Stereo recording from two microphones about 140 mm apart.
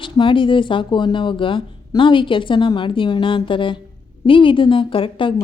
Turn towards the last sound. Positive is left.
turn(degrees=40)  # may be behind; listen again after turning